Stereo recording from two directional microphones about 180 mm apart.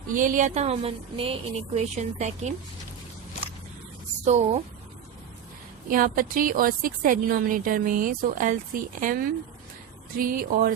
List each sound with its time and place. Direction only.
0.1 s speech: 50° right (ahead or behind)
5.9 s speech: 50° right (ahead or behind)